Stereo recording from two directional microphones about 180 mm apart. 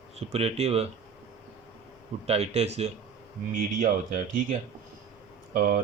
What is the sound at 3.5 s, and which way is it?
Speech, 45° right (ahead or behind).